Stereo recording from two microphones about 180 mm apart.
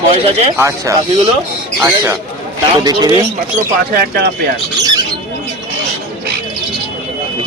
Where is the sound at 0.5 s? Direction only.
15° right (ahead or behind).